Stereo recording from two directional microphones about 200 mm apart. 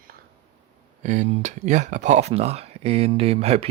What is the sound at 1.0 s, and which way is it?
Speech, 35° right (ahead or behind).